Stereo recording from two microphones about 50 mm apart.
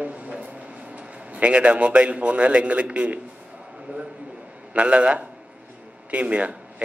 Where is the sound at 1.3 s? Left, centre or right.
Right.